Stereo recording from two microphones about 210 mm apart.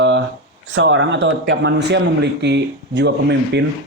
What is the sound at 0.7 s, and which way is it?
A man's voice, 60° right (ahead or behind).